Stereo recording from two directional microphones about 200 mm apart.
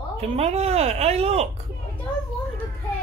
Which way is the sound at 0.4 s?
30° right (ahead or behind).